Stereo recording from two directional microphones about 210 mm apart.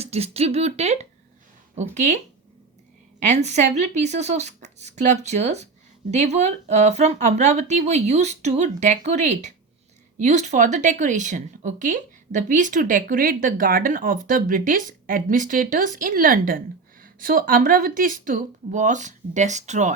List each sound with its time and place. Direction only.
0.0 s a woman's voice: 30° right (ahead or behind)
3.2 s a woman's voice: 35° right (ahead or behind)